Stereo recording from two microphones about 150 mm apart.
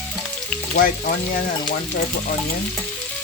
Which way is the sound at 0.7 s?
70° left (ahead or behind).